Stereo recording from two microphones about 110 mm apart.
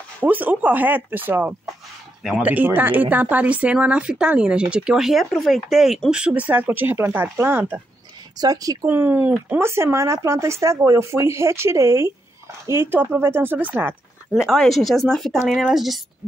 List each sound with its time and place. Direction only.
0.2 s speech: 15° right (ahead or behind)
8.4 s speech: 35° right (ahead or behind)
8.8 s speech: 20° right (ahead or behind)
14.3 s speech: centre (ahead or behind)